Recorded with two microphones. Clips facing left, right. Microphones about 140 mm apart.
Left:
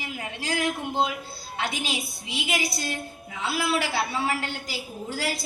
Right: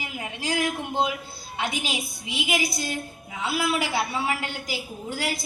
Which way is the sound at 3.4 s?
15° right (ahead or behind).